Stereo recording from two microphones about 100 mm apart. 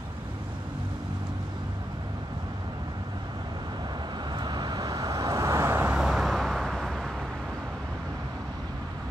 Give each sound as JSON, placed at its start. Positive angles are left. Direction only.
{"t": 4.4, "sound": "vehicle", "side_deg": -45}
{"t": 5.9, "sound": "vehicle", "side_deg": -5}